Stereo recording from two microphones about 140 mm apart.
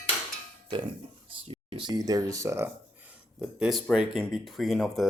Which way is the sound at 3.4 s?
5° right (ahead or behind).